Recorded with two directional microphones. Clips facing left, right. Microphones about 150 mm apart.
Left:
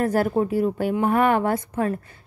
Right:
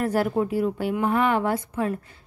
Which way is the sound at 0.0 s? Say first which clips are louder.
Left 2 dB; 45° left (ahead or behind).